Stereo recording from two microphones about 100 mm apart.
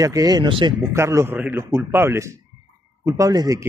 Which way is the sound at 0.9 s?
30° right (ahead or behind).